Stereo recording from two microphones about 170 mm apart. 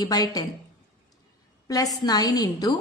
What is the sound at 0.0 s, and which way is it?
Speech, 20° left (ahead or behind).